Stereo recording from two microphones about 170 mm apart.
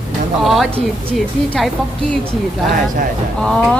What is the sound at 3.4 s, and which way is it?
Speech, 5° left (ahead or behind).